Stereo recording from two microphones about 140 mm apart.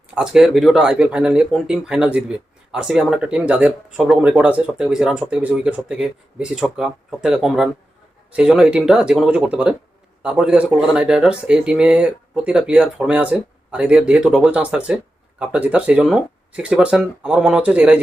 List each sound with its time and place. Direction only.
0.1 s speech: 5° right (ahead or behind)